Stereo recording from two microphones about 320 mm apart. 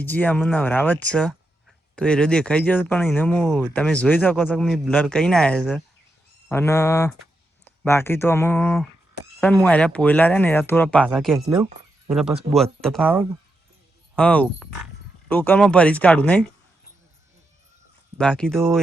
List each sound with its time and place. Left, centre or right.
0.0 s speech: centre
18.2 s speech: centre